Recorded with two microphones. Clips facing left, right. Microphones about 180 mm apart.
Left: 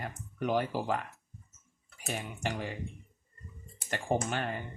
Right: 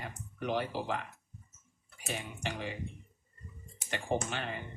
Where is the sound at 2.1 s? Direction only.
45° left (ahead or behind).